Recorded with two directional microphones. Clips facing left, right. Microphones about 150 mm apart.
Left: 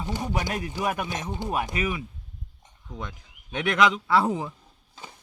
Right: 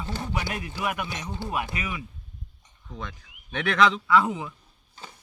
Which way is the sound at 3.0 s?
15° left (ahead or behind).